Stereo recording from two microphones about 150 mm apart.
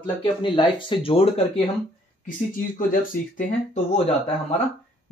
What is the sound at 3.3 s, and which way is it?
Speech, 50° left (ahead or behind).